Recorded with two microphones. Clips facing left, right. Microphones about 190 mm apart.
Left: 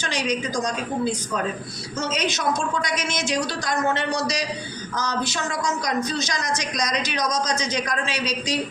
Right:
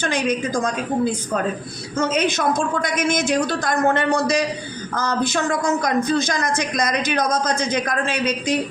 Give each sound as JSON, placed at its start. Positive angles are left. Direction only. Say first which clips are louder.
{"t": 0.0, "sound": "a man's voice", "louder": "right 4 dB", "side_deg": -55}